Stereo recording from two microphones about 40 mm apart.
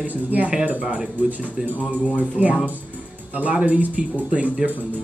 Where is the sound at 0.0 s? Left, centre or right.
Right.